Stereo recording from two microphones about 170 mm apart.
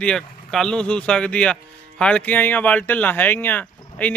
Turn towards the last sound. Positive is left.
turn(degrees=10)  # may be behind; listen again after turning